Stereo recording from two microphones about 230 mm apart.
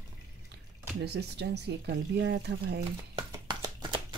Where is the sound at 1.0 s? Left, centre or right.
Right.